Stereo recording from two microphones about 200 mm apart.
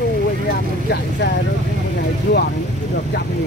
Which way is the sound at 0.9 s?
55° left (ahead or behind).